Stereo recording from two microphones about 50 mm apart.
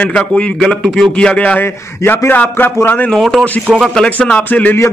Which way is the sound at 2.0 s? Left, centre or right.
Left.